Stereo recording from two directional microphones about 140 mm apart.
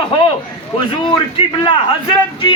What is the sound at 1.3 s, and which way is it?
Speech, 35° left (ahead or behind).